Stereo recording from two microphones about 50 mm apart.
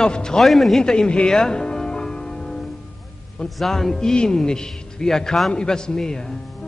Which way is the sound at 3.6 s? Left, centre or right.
Centre.